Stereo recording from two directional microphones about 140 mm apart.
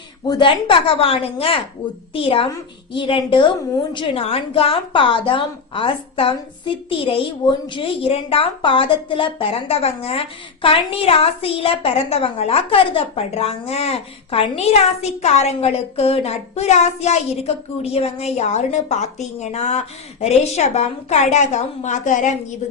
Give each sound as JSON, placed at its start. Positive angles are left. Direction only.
{"t": 0.3, "sound": "a woman's voice", "side_deg": 35}